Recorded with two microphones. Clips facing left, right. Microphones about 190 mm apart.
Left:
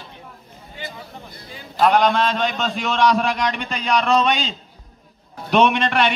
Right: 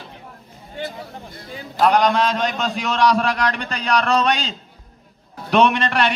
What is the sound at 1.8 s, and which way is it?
A man's voice, centre (ahead or behind).